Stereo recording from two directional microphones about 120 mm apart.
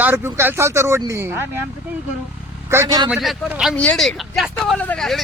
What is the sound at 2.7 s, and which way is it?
Speech, 25° right (ahead or behind).